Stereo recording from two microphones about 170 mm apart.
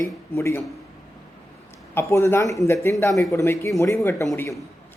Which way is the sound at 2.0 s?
15° left (ahead or behind).